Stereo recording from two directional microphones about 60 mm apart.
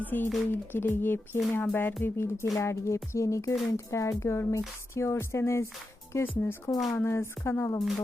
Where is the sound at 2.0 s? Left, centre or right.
Left.